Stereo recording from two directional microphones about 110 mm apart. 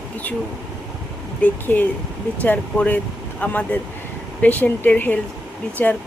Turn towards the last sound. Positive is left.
turn(degrees=15)  # may be behind; listen again after turning